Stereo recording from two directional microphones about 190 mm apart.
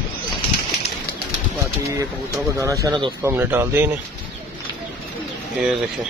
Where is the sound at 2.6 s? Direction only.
15° right (ahead or behind).